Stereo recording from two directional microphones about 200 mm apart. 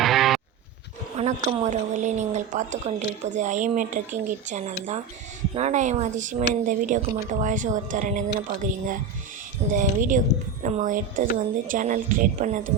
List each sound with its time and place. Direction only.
0.0 s guitar: centre (ahead or behind)
1.1 s speech: 30° right (ahead or behind)